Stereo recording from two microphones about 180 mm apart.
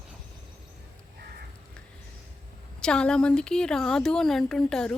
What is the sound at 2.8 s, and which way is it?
A woman's voice, 5° left (ahead or behind).